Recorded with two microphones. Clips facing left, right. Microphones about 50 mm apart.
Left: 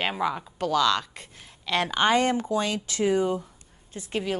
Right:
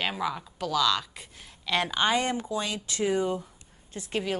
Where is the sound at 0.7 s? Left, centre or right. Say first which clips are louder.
Left 3 dB; left.